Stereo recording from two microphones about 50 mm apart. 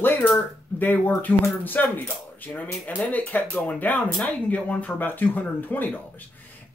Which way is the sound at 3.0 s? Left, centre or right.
Left.